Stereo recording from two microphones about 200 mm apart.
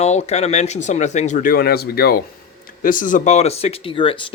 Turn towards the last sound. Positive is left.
turn(degrees=25)  # may be behind; listen again after turning